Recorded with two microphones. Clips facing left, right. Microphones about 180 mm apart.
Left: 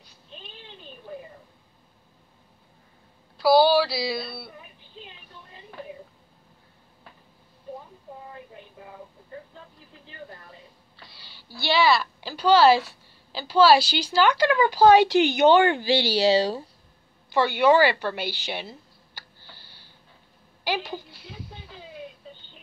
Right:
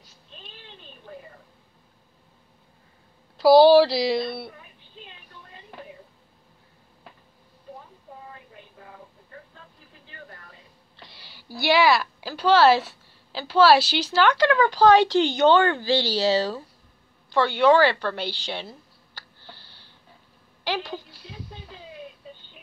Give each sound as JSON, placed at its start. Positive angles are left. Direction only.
{"t": 3.8, "sound": "a sound", "side_deg": -20}
{"t": 11.0, "sound": "a woman's voice", "side_deg": -20}
{"t": 20.6, "sound": "speech", "side_deg": 5}